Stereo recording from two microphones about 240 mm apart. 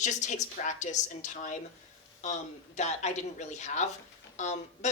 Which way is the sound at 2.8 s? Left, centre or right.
Left.